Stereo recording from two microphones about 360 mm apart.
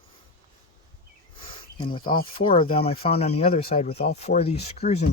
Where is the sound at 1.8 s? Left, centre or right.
Centre.